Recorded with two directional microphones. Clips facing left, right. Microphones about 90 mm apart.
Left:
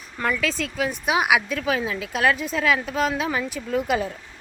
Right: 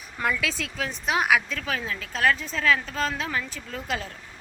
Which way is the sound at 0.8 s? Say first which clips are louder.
Left 2 dB; 10° left (ahead or behind).